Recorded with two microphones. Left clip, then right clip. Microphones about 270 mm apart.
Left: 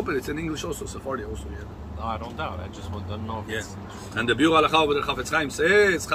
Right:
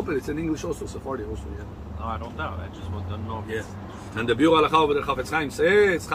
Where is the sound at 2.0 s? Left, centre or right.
Left.